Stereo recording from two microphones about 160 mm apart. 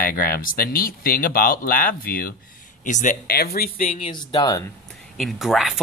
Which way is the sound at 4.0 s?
30° left (ahead or behind).